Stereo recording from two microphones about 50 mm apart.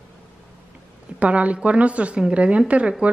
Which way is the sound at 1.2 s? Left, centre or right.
Right.